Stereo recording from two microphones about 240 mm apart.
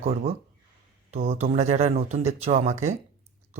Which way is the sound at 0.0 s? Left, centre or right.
Right.